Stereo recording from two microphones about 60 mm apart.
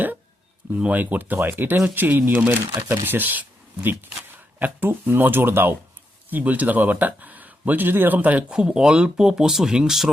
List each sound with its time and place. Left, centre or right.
0.8 s speech: right
4.6 s speech: right
6.3 s speech: right
8.5 s speech: centre